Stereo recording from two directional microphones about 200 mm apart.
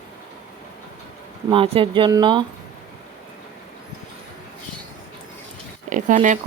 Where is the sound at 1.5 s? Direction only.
25° right (ahead or behind).